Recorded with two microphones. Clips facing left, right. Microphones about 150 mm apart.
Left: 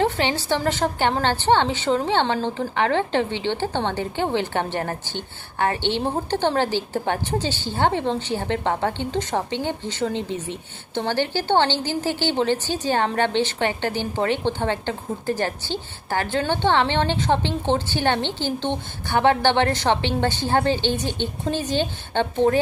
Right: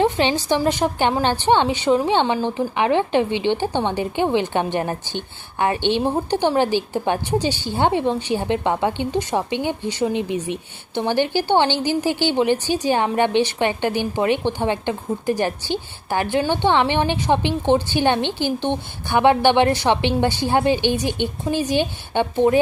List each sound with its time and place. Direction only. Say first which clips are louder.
0.0 s a woman's voice: right 3 dB; 20° right (ahead or behind)